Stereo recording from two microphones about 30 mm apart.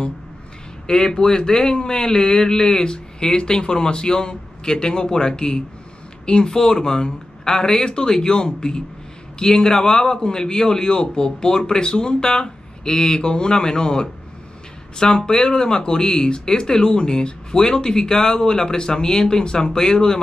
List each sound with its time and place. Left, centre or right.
0.8 s speech: left